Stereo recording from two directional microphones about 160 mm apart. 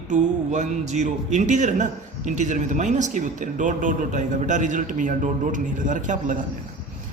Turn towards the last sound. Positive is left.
turn(degrees=-50)  # may be behind; listen again after turning